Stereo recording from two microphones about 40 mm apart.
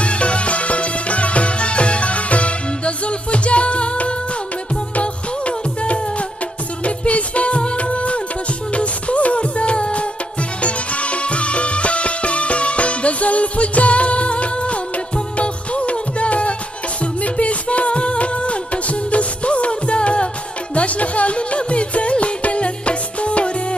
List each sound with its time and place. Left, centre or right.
0.0 s music: left